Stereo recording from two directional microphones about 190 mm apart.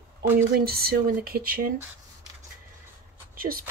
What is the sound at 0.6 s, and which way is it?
Speech, 55° right (ahead or behind).